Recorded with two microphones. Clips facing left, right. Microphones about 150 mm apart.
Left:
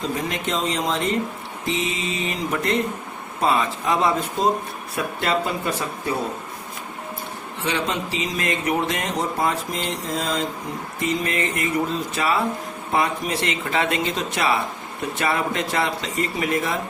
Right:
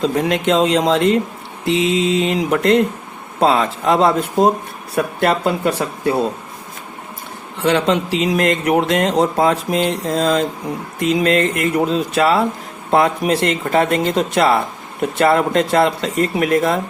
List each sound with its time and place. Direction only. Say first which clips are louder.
0.0 s speech: right 9 dB; 80° right
7.6 s speech: right 9 dB; 70° right (ahead or behind); by 14.0 s 50° right (ahead or behind)
14.0 s speech: right 8 dB; 60° right (ahead or behind)